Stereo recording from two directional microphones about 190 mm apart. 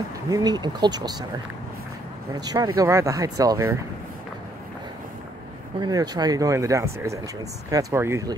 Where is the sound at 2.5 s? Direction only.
20° right (ahead or behind).